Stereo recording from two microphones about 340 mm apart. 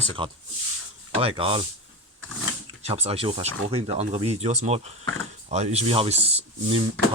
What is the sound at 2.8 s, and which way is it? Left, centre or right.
Speech, centre.